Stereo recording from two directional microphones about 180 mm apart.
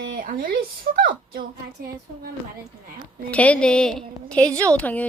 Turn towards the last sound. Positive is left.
turn(degrees=10)  # may be behind; listen again after turning